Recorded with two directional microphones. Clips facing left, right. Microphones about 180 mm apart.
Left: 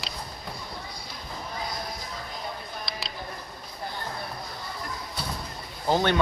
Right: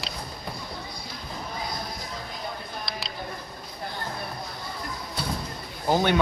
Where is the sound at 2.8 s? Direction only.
Centre (ahead or behind).